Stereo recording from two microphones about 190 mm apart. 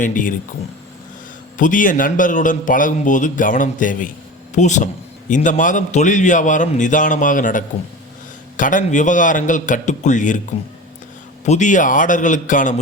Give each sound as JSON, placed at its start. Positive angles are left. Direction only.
{"t": 0.0, "sound": "a man's voice", "side_deg": 45}
{"t": 1.5, "sound": "a man's voice", "side_deg": 45}
{"t": 11.4, "sound": "a man's voice", "side_deg": 40}